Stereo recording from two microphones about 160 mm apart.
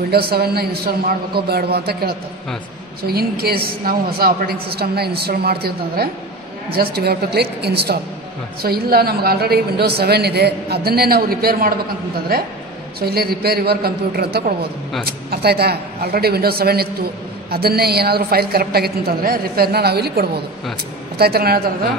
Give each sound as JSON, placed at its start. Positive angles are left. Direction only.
{"t": 0.1, "sound": "a woman's voice", "side_deg": -80}
{"t": 8.6, "sound": "a woman's voice", "side_deg": -70}
{"t": 13.0, "sound": "a woman's voice", "side_deg": -75}